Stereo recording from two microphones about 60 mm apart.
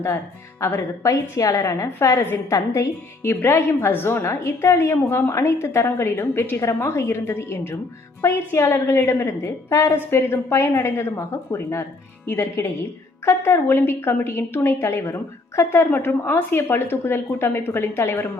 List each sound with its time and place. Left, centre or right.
1.0 s a woman's voice: left
3.2 s a woman's voice: left
5.9 s a woman's voice: left
9.1 s a woman's voice: left
15.9 s a woman's voice: left